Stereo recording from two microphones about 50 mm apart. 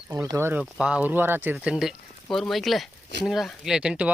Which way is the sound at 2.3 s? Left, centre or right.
Centre.